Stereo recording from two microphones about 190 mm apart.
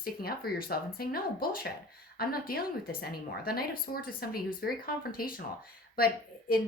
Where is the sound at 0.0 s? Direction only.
50° left (ahead or behind).